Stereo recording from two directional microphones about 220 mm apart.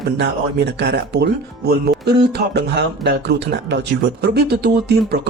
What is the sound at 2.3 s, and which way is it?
Speech, 50° right (ahead or behind).